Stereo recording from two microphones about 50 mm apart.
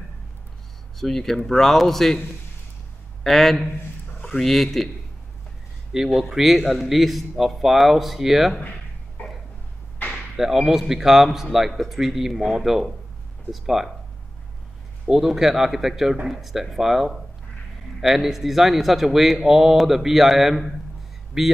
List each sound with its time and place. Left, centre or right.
0.9 s speech: centre
3.3 s speech: centre
6.0 s speech: centre
9.2 s a sound: left
10.3 s a man's voice: centre
15.0 s a man's voice: centre